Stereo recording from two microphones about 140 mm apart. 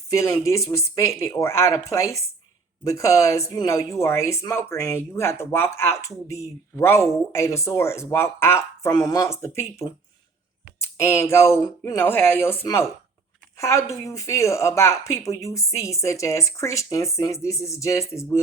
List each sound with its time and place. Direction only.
0.1 s speech: 20° left (ahead or behind)